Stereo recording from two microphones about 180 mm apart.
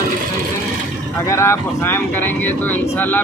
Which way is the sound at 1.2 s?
15° left (ahead or behind).